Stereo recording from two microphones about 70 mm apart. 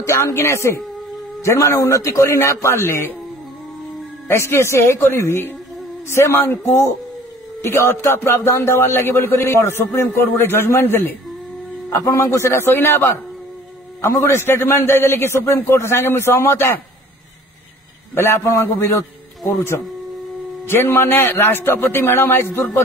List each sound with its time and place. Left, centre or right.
0.0 s speech: left
4.3 s speech: left
7.6 s speech: left
11.9 s speech: left
18.1 s a man's voice: left
20.6 s speech: left